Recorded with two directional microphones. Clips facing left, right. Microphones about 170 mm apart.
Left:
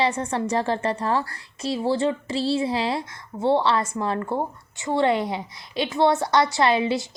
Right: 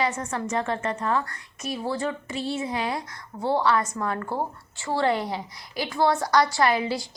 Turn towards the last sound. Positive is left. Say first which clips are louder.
# left 3 dB
turn(degrees=25)  # may be behind; listen again after turning